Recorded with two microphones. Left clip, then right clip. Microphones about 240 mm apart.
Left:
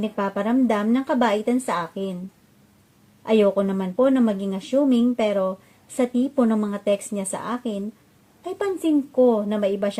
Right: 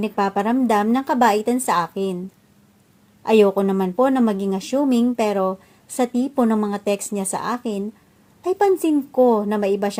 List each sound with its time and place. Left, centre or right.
0.0 s speech: centre
3.2 s speech: right